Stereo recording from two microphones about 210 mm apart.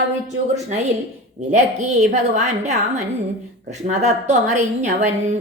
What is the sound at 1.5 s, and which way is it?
A woman's voice, 35° right (ahead or behind).